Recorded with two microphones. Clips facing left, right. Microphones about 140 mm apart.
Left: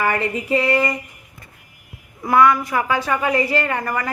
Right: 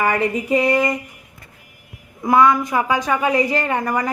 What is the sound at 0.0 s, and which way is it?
Speech, 10° right (ahead or behind).